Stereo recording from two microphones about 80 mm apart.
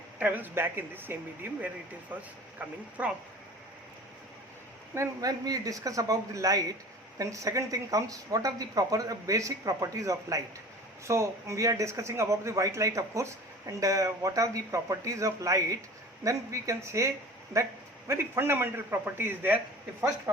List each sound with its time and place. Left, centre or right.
0.2 s speech: right
5.2 s a woman's voice: right